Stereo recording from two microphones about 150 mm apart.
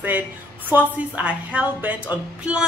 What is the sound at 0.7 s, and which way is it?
Speech, 10° right (ahead or behind).